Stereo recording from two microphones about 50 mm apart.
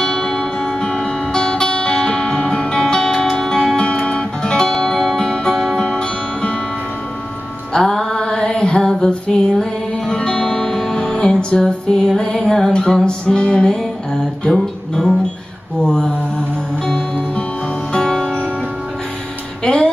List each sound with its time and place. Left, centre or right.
0.0 s music: centre
7.7 s music: centre
15.8 s mantra: centre
17.9 s music: centre
19.6 s music: centre